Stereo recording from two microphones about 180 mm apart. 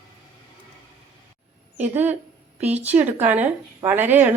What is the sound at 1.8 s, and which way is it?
A woman's voice, 10° right (ahead or behind).